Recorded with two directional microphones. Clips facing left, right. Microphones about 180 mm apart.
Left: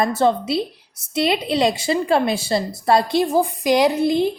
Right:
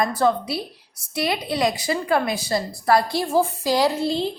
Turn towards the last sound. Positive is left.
turn(degrees=15)  # may be behind; listen again after turning